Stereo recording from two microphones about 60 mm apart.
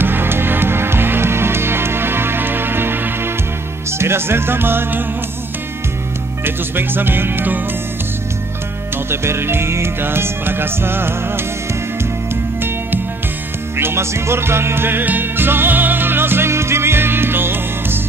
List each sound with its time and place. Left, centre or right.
0.0 s music: right
6.4 s music: right
8.9 s music: right
13.7 s music: right